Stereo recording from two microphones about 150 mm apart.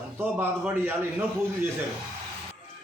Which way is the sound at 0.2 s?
15° right (ahead or behind).